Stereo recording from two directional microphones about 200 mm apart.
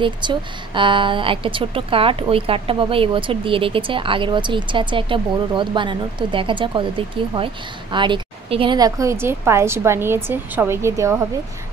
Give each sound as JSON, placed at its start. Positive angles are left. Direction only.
{"t": 0.0, "sound": "a woman's voice", "side_deg": -25}